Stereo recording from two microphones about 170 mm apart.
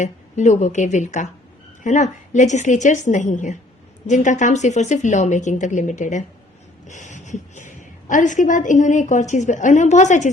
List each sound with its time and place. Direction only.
0.0 s a woman's voice: 45° left (ahead or behind)